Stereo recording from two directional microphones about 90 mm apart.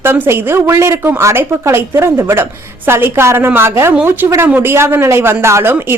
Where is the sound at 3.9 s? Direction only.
20° right (ahead or behind).